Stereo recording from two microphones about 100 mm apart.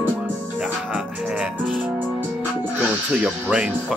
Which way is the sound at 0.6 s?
5° right (ahead or behind).